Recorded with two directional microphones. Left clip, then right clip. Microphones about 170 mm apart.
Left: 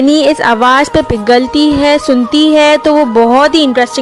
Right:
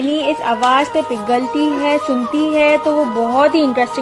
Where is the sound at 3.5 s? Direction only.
Centre (ahead or behind).